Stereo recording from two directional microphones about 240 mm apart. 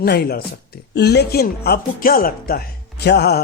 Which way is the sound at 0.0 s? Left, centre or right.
Left.